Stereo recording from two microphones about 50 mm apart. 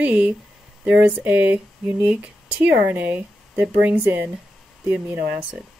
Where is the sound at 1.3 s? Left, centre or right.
Right.